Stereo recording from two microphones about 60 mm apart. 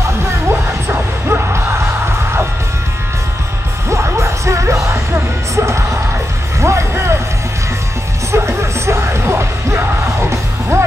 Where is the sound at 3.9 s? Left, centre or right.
Right.